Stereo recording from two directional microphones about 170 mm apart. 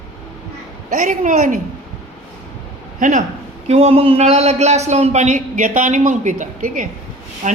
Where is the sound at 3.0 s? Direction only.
50° right (ahead or behind).